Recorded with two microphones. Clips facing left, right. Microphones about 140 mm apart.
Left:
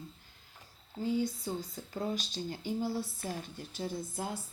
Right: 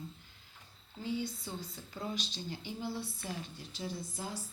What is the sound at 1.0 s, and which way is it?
Speech, 45° left (ahead or behind).